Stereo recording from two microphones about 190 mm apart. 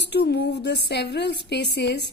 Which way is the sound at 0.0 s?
60° left (ahead or behind).